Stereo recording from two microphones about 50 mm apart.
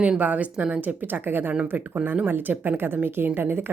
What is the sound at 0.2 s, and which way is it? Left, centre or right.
A woman's voice, right.